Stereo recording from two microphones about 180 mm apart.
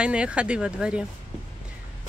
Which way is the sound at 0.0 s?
5° right (ahead or behind).